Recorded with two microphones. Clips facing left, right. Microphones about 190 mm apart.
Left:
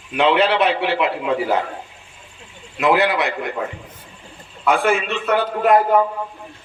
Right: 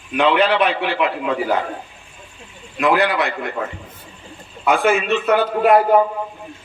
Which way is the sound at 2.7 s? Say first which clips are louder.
Even; 20° left (ahead or behind).